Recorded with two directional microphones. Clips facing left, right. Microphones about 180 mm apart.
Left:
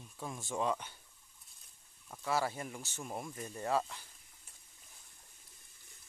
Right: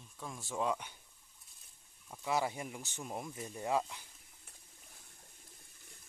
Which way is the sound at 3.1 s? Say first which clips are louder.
Even; 5° right (ahead or behind).